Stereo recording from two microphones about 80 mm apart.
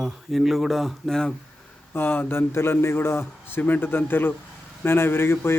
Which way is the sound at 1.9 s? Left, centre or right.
Left.